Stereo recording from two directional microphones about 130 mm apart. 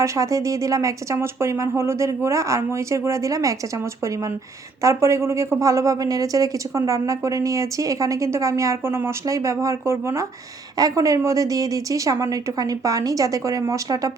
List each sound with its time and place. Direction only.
0.0 s a woman's voice: 25° right (ahead or behind)